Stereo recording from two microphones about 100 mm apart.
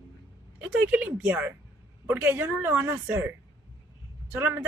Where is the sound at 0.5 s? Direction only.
15° right (ahead or behind).